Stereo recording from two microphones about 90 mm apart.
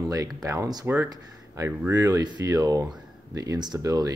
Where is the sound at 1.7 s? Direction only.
15° right (ahead or behind).